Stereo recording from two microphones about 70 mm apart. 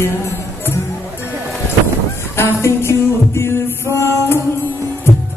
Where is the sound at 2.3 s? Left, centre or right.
Left.